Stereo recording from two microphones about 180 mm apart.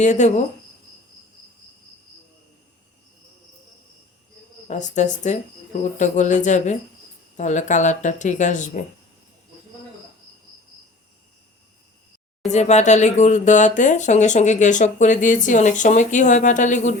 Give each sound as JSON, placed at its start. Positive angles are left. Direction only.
{"t": 0.0, "sound": "speech", "side_deg": 40}
{"t": 4.7, "sound": "speech", "side_deg": 40}
{"t": 12.5, "sound": "speech", "side_deg": 40}